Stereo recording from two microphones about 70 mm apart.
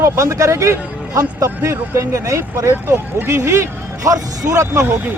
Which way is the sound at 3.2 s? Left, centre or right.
Right.